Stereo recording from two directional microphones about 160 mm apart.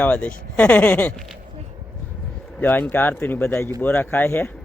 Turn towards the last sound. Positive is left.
turn(degrees=10)  # may be behind; listen again after turning